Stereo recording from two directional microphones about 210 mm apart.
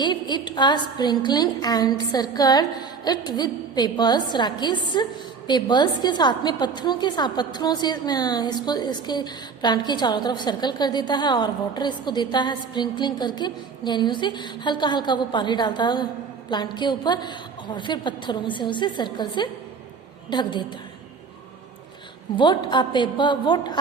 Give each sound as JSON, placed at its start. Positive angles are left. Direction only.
{"t": 0.0, "sound": "a woman's voice", "side_deg": 20}
{"t": 22.4, "sound": "a woman's voice", "side_deg": 20}